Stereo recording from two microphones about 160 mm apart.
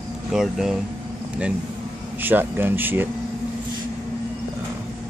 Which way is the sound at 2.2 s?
10° right (ahead or behind).